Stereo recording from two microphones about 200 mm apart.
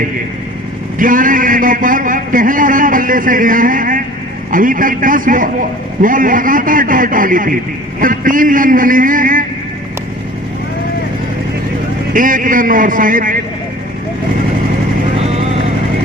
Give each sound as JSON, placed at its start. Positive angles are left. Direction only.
{"t": 0.9, "sound": "a man's voice", "side_deg": -45}
{"t": 12.1, "sound": "a man's voice", "side_deg": -40}
{"t": 15.2, "sound": "vehicle", "side_deg": -30}